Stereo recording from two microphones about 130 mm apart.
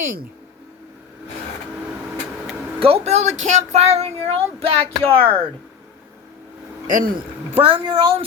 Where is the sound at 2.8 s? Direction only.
50° right (ahead or behind).